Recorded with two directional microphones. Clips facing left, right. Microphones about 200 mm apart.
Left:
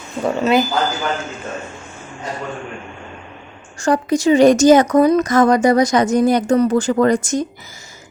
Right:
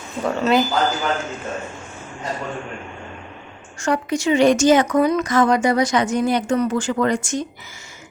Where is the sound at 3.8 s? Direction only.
35° left (ahead or behind).